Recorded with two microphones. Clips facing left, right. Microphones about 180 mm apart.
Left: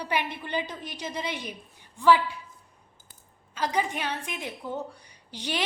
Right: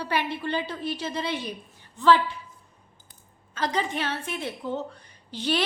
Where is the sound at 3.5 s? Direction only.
10° left (ahead or behind).